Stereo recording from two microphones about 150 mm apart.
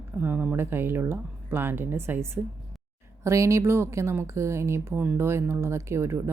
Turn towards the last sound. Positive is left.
turn(degrees=-15)  # may be behind; listen again after turning